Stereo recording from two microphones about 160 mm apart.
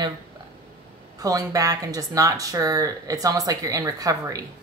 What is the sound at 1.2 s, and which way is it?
Speech, 20° right (ahead or behind).